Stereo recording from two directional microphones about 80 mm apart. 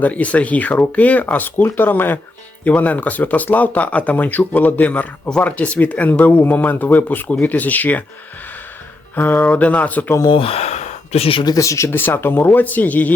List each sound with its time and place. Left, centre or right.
0.0 s speech: centre
9.1 s speech: left
11.3 s speech: left
11.5 s speech: left
11.9 s speech: left